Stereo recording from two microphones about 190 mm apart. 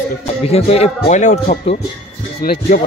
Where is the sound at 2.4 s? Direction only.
50° left (ahead or behind).